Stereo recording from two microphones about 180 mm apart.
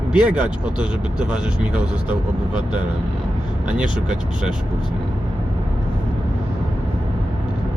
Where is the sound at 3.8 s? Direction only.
5° right (ahead or behind).